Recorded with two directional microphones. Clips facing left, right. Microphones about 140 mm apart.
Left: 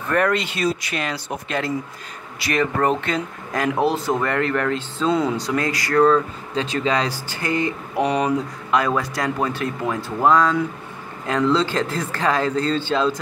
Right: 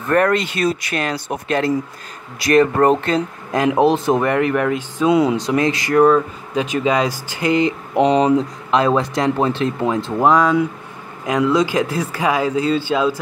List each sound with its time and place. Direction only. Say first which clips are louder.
0.1 s speech: right 4 dB; 45° right (ahead or behind)
3.5 s speech: right 5 dB; 20° right (ahead or behind)